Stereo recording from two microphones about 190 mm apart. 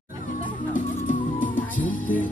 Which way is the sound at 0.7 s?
45° left (ahead or behind).